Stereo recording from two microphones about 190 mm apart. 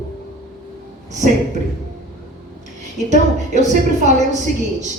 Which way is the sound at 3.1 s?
40° right (ahead or behind).